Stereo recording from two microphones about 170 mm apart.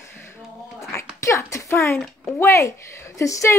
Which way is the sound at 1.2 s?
15° left (ahead or behind).